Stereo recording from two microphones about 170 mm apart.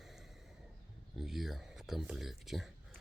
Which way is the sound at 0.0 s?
Centre (ahead or behind).